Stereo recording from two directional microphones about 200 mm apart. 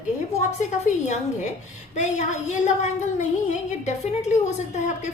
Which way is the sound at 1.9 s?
35° left (ahead or behind).